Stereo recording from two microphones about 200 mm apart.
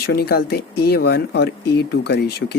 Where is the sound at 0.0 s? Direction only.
50° left (ahead or behind).